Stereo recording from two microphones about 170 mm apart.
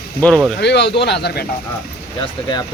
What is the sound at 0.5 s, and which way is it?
Speech, 80° left.